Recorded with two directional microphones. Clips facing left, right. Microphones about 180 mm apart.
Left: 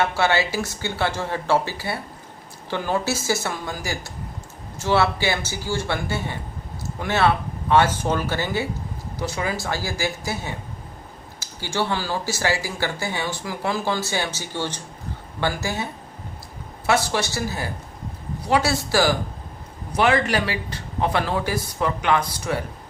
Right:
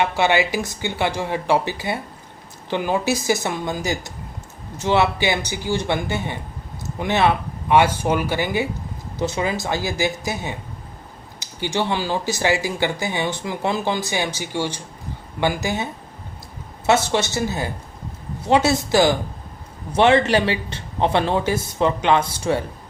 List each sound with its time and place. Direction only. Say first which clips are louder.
0.0 s speech: right 2 dB; 15° right (ahead or behind)